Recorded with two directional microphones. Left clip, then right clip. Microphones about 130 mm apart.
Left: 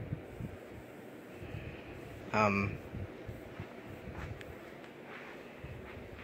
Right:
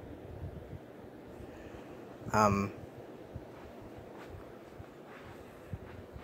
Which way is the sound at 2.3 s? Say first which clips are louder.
Right 2 dB; 20° right (ahead or behind).